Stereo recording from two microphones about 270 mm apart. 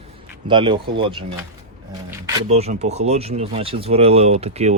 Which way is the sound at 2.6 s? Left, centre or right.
Right.